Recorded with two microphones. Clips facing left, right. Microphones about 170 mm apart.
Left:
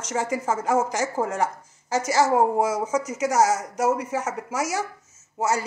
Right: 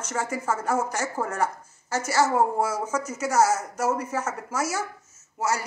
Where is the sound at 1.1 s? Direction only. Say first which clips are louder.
Left 2 dB; 20° left (ahead or behind).